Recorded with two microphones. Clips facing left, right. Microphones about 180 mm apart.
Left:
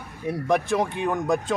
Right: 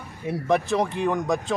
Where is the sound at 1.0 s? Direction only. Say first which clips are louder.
Even; centre (ahead or behind).